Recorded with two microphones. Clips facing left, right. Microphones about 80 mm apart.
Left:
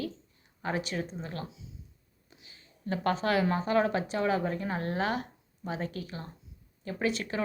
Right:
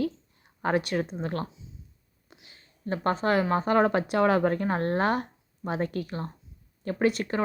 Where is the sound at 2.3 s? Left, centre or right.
Right.